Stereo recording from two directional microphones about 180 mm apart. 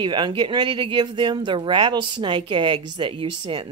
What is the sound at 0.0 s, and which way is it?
A woman's voice, 25° right (ahead or behind).